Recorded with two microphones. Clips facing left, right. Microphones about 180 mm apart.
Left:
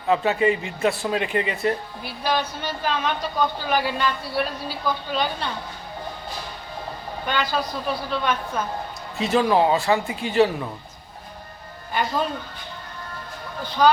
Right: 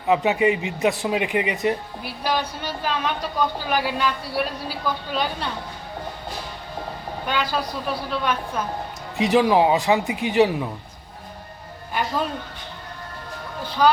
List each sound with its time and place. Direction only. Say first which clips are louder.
0.1 s speech: right 1 dB; 15° right (ahead or behind)
7.3 s speech: even; 5° right (ahead or behind)
13.8 s speech: left 1 dB; 5° right (ahead or behind)